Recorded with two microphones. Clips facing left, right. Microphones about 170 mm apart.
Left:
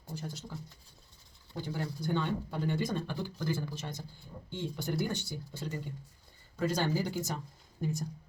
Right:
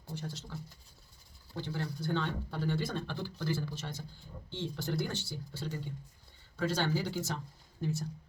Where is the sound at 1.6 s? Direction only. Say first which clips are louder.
Left 1 dB; 10° left (ahead or behind).